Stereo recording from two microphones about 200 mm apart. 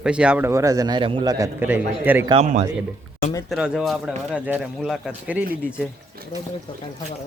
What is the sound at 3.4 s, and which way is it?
A man's voice, centre (ahead or behind).